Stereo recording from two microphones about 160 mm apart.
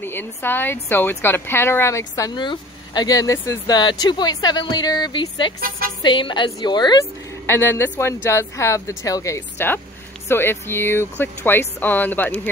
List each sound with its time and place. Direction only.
0.0 s speech: 15° left (ahead or behind)
7.4 s speech: 15° left (ahead or behind)